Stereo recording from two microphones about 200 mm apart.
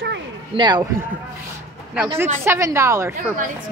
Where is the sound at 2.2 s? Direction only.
15° right (ahead or behind).